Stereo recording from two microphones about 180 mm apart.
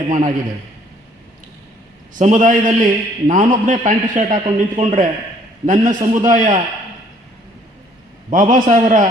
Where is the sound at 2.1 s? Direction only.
45° right (ahead or behind).